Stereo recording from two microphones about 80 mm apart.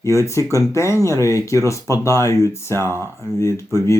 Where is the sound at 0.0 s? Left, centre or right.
Left.